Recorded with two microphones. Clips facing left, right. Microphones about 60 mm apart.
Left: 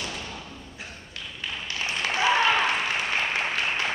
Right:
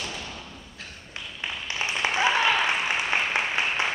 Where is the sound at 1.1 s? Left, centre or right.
Right.